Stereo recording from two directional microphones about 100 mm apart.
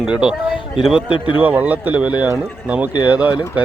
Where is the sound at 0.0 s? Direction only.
10° right (ahead or behind).